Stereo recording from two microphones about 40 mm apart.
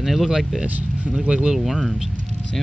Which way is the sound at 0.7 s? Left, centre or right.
Right.